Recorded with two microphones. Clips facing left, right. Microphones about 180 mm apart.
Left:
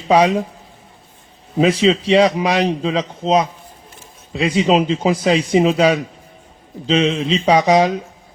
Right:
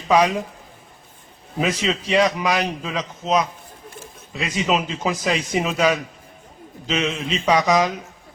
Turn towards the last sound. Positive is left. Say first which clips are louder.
# left 5 dB
turn(degrees=30)  # may be behind; listen again after turning